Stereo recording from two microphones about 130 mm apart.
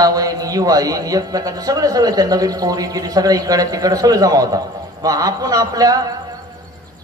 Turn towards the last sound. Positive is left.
turn(degrees=-30)  # may be behind; listen again after turning